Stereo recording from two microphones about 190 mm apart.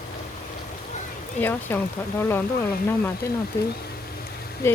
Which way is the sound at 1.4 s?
10° left (ahead or behind).